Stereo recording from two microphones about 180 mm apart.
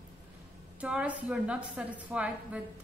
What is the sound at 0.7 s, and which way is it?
A woman's voice, 5° right (ahead or behind).